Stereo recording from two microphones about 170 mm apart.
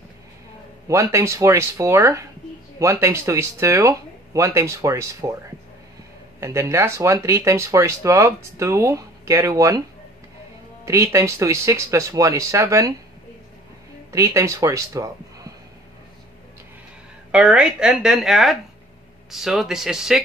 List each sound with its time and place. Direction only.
0.8 s speech: 15° right (ahead or behind)
6.4 s speech: 15° right (ahead or behind)
10.9 s speech: 15° right (ahead or behind)
14.1 s a man's voice: 20° right (ahead or behind)
17.3 s speech: 5° right (ahead or behind)